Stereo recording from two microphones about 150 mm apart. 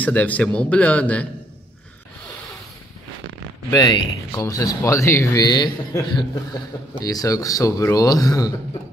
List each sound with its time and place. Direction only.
0.0 s a man's voice: 10° left (ahead or behind)
3.7 s speech: 25° left (ahead or behind)